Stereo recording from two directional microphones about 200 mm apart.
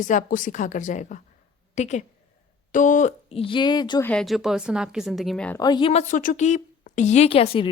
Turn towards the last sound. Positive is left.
turn(degrees=25)  # may be behind; listen again after turning